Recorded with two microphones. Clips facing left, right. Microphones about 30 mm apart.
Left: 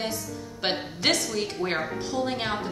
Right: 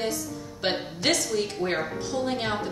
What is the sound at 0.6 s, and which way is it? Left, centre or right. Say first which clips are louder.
A woman's voice: even; centre.